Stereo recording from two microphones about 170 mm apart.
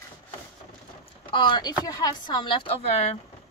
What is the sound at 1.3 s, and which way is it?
Speech, 25° left (ahead or behind).